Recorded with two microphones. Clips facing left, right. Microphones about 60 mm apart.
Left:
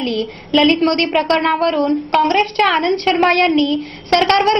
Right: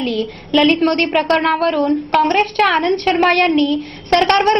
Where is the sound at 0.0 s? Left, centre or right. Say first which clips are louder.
Even; centre.